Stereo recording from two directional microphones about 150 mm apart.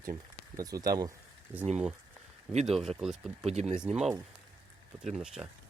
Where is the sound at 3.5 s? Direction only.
45° right (ahead or behind).